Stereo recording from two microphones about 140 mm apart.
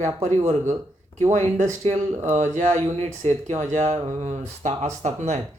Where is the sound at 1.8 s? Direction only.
55° right (ahead or behind).